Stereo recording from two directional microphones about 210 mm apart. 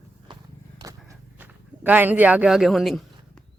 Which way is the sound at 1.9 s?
10° right (ahead or behind).